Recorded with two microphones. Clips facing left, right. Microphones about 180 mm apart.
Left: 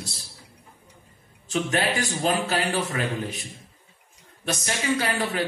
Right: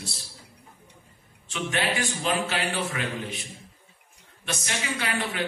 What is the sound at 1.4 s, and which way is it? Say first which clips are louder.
A man's voice: left 4 dB; 40° left (ahead or behind).